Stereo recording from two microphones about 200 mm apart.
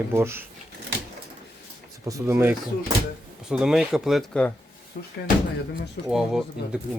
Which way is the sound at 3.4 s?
Centre (ahead or behind).